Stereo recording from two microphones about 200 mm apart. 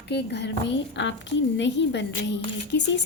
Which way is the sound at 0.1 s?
60° left (ahead or behind).